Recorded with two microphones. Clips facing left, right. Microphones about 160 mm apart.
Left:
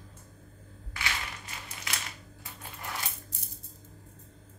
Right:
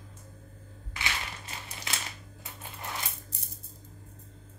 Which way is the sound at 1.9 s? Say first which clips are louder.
Right 1 dB; 30° right (ahead or behind).